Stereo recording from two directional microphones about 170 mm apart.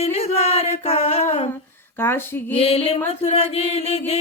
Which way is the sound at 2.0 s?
15° left (ahead or behind).